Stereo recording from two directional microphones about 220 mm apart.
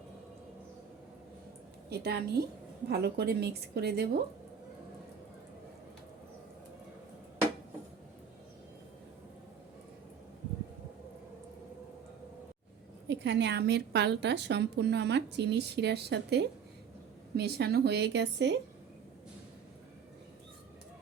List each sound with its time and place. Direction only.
1.9 s a woman's voice: 45° right (ahead or behind)
13.1 s a woman's voice: 50° right (ahead or behind)